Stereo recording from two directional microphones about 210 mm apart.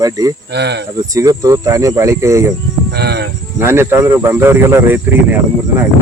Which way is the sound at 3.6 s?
10° right (ahead or behind).